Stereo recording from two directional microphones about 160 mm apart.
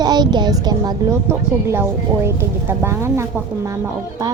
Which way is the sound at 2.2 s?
15° right (ahead or behind).